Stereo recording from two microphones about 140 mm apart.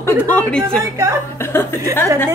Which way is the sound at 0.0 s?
15° left (ahead or behind).